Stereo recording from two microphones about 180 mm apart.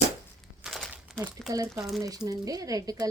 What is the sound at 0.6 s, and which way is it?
Crumpling, centre (ahead or behind).